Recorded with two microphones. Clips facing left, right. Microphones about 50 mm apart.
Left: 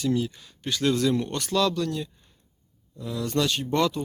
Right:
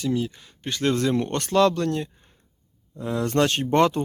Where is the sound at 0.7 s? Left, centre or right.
Right.